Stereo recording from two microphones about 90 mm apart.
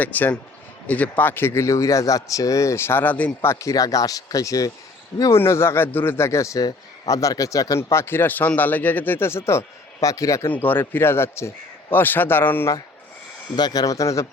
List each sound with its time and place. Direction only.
0.0 s speech: 20° left (ahead or behind)
3.4 s speech: 35° left (ahead or behind)
5.2 s speech: 30° left (ahead or behind)
10.5 s speech: 20° left (ahead or behind)
13.6 s speech: 50° left (ahead or behind)